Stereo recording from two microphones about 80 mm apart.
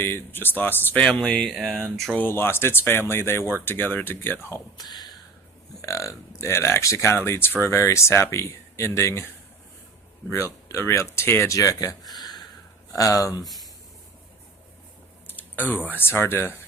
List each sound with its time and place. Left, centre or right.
0.0 s speech: left
1.0 s speech: centre
2.1 s speech: left
4.8 s speech: left
5.8 s speech: left
10.2 s speech: left
12.1 s a sound: left
12.9 s speech: left
15.3 s a sound: left
16.0 s speech: left